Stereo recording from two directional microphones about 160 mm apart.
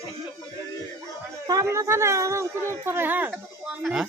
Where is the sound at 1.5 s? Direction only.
20° right (ahead or behind).